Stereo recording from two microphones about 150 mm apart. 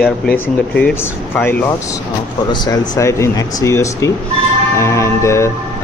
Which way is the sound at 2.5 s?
25° left (ahead or behind).